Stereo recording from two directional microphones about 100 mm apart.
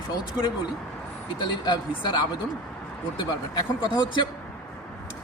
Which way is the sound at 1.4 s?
45° left (ahead or behind).